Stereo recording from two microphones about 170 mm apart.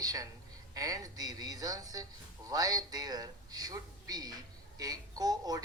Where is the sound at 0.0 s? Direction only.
20° right (ahead or behind).